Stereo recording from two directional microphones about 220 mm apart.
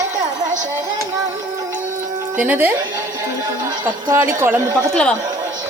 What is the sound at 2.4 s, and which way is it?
Speech, 5° right (ahead or behind).